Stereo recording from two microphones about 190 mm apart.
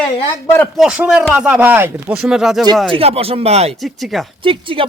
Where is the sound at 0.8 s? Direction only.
5° right (ahead or behind).